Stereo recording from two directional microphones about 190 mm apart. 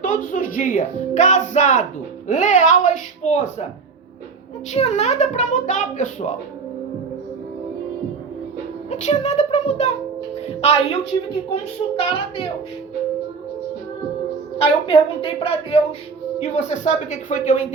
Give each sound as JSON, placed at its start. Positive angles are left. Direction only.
{"t": 0.0, "sound": "speech", "side_deg": 45}
{"t": 4.7, "sound": "speech", "side_deg": 35}
{"t": 8.9, "sound": "speech", "side_deg": 40}
{"t": 14.6, "sound": "speech", "side_deg": 30}